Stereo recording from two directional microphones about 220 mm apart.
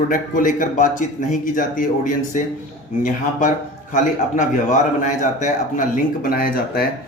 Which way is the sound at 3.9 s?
35° left (ahead or behind).